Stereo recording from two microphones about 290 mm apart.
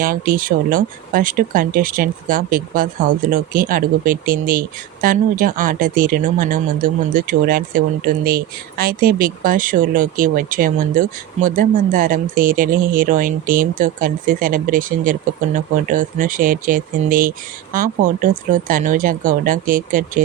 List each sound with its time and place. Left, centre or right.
0.0 s speech: right